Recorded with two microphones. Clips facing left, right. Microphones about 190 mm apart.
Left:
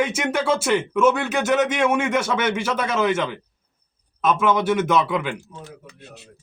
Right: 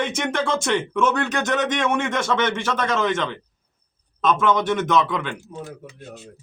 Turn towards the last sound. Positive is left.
turn(degrees=10)  # may be behind; listen again after turning